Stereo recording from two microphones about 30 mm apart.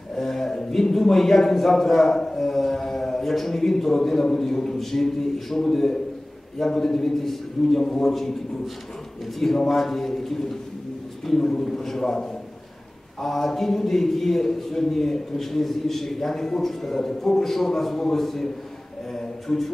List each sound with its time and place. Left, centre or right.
0.2 s a man's voice: centre
9.7 s a man's voice: centre
11.3 s a man's voice: centre
19.1 s a sound: centre